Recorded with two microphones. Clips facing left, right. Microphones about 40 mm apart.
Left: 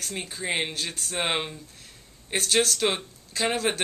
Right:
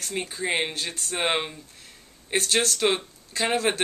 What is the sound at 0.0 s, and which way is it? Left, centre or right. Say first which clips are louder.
Speech: right 3 dB; centre.